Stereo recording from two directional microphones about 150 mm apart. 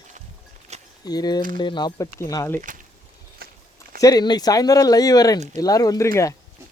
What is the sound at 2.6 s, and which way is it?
Speech, 60° right (ahead or behind).